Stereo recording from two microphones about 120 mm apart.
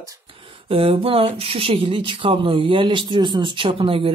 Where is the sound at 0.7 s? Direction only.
50° right (ahead or behind).